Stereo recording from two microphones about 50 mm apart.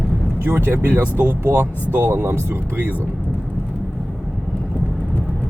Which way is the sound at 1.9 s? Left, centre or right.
Right.